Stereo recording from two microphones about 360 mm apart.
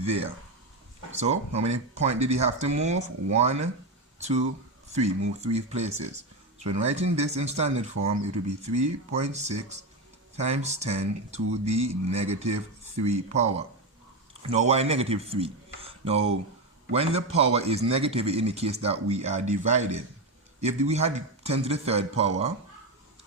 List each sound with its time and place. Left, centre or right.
1.1 s speech: centre